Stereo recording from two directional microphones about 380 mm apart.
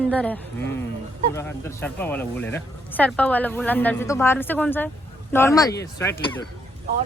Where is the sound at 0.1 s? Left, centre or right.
Centre.